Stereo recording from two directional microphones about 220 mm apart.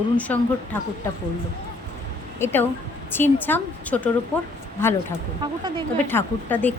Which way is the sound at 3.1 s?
10° left (ahead or behind).